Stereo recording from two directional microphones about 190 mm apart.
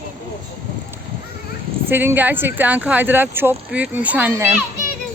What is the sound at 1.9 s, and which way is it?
Speech, 10° right (ahead or behind).